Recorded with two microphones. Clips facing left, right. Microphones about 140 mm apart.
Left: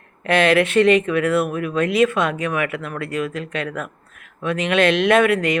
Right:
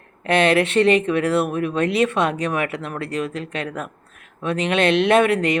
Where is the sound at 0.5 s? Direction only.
30° right (ahead or behind).